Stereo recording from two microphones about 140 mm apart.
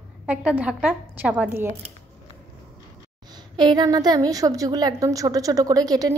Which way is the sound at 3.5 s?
30° right (ahead or behind).